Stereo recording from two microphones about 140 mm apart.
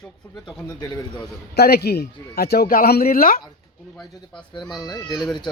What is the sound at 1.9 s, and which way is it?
Speech, 90° left.